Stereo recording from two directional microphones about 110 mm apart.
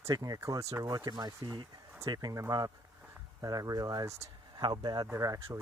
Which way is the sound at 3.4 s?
35° right (ahead or behind).